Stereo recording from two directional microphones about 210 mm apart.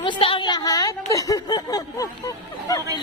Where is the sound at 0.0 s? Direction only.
25° left (ahead or behind).